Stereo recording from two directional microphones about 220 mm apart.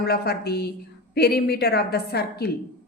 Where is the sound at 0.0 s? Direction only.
45° left (ahead or behind).